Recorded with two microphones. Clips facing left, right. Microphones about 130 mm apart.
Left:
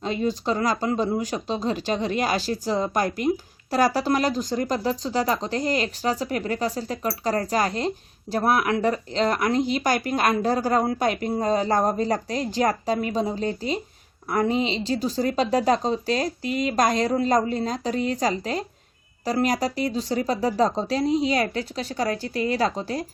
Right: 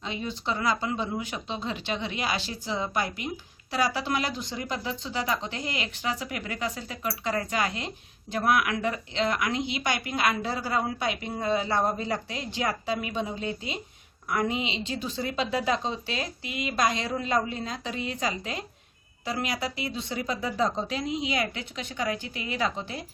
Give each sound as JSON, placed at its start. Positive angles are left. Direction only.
{"t": 0.0, "sound": "speech", "side_deg": 40}